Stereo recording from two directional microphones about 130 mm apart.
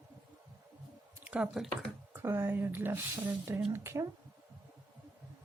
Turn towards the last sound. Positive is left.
turn(degrees=-20)  # may be behind; listen again after turning